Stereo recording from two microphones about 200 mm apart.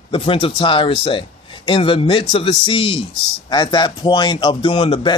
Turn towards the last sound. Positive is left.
turn(degrees=25)  # may be behind; listen again after turning